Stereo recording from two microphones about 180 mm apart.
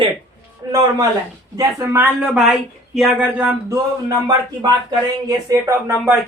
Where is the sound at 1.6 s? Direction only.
15° right (ahead or behind).